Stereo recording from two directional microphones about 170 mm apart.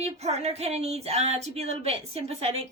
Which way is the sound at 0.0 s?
40° right (ahead or behind).